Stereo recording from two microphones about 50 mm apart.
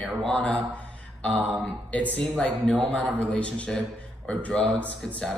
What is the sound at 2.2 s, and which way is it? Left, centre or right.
A man's voice, centre.